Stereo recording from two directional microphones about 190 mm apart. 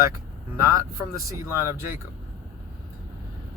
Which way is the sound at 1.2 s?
15° right (ahead or behind).